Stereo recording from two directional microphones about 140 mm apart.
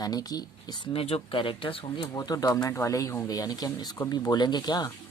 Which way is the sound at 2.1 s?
25° left (ahead or behind).